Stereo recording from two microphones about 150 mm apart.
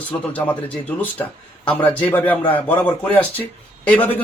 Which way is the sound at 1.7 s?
10° left (ahead or behind).